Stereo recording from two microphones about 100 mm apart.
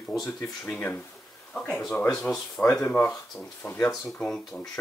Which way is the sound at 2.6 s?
20° left (ahead or behind).